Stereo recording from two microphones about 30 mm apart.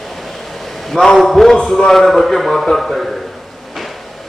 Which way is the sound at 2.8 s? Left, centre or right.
Centre.